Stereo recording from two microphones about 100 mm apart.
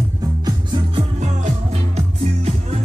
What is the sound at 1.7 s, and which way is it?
Music, 90° right.